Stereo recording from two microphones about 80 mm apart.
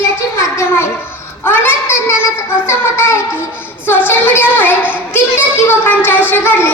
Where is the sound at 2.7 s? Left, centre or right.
Left.